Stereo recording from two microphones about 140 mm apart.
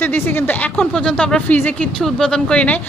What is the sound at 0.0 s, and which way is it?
Speech, 15° left (ahead or behind).